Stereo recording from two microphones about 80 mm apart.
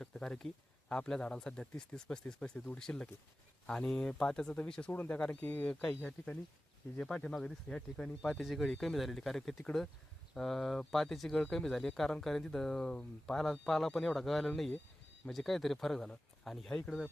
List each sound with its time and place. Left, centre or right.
0.0 s speech: centre
8.4 s speech: centre